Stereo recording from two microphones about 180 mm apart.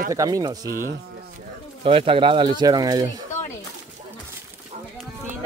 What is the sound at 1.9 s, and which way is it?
Speech, 30° right (ahead or behind).